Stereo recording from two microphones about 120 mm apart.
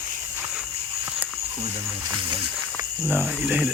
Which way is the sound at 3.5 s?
10° right (ahead or behind).